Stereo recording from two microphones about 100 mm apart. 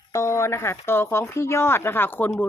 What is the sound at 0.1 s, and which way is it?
Speech, 30° left (ahead or behind).